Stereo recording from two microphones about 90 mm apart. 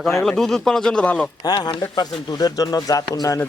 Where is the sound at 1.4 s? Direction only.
50° left (ahead or behind).